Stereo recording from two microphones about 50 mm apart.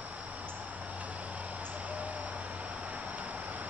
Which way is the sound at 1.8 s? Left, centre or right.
Right.